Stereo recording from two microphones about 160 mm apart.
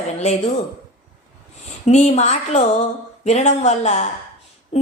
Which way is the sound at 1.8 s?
45° left (ahead or behind).